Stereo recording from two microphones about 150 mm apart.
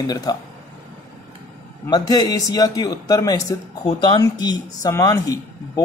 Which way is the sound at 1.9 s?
25° left (ahead or behind).